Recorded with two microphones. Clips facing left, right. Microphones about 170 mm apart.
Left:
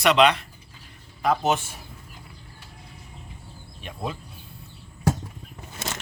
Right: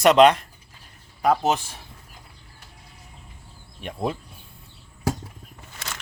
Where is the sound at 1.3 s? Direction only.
35° right (ahead or behind).